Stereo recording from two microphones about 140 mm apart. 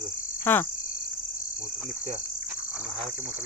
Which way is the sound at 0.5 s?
15° left (ahead or behind).